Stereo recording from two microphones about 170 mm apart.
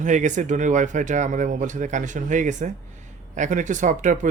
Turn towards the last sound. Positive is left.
turn(degrees=-45)  # may be behind; listen again after turning